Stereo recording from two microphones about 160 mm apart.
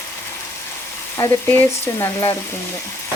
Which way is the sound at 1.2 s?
15° left (ahead or behind).